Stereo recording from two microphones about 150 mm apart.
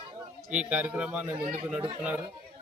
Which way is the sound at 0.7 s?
10° right (ahead or behind).